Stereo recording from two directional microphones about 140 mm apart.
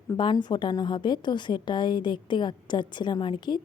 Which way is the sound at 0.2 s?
30° left (ahead or behind).